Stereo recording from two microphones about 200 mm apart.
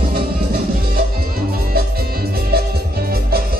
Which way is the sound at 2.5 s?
50° right (ahead or behind).